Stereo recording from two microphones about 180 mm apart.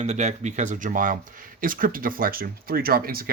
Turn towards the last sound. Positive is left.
turn(degrees=-55)  # may be behind; listen again after turning